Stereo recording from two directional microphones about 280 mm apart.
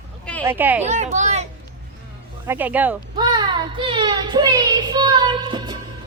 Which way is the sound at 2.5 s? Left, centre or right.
Centre.